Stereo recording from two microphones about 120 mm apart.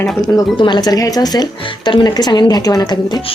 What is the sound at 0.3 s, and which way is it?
Speech, 40° left (ahead or behind).